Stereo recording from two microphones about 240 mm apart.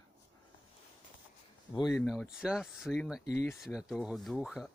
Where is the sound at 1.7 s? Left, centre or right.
Centre.